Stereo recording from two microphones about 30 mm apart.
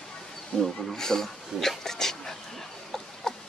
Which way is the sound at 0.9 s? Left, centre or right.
Centre.